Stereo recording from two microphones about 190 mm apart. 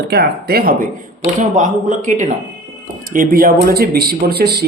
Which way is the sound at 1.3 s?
40° right (ahead or behind).